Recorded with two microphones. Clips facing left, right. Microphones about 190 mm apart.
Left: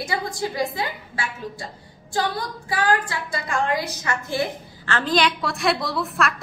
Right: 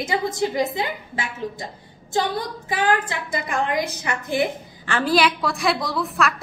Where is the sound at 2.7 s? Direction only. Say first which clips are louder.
Right 1 dB; 20° right (ahead or behind); by 6.3 s centre (ahead or behind).